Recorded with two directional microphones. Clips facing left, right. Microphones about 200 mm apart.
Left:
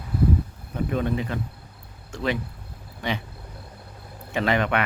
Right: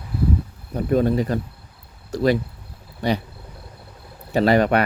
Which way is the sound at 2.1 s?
40° right (ahead or behind).